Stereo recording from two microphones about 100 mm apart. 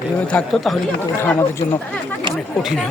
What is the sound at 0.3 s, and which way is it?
Speech, 10° left (ahead or behind).